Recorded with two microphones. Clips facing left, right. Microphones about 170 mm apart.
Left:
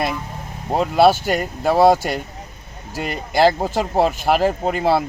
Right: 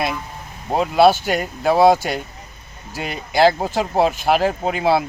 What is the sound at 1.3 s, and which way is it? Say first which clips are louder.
Speech: even; 10° right (ahead or behind).